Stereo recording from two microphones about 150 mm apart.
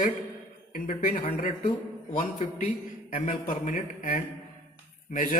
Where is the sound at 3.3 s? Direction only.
60° left (ahead or behind).